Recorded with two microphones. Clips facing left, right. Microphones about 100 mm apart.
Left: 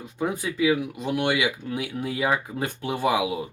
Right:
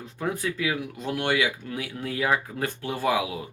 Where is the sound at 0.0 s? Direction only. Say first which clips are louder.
Left 1 dB; 15° left (ahead or behind).